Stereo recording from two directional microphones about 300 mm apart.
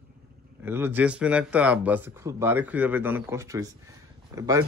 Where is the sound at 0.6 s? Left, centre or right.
Centre.